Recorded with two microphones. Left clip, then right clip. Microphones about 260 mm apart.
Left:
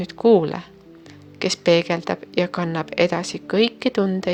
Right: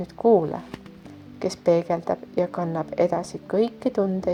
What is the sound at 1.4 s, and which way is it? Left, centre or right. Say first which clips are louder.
Speech: left 5 dB; left.